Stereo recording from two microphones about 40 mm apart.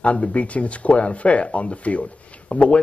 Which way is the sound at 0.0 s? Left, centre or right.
Left.